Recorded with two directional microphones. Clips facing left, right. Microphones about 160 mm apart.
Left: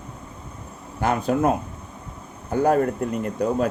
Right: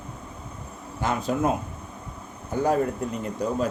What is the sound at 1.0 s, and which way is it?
Speech, 60° left (ahead or behind).